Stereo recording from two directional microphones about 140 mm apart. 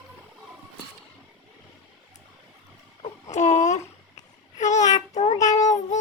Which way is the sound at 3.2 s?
55° left (ahead or behind).